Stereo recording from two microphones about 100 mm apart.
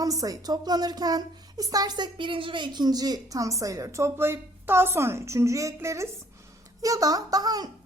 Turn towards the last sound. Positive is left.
turn(degrees=-40)  # may be behind; listen again after turning